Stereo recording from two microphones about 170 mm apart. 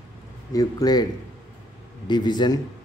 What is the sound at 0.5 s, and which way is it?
Speech, 20° left (ahead or behind).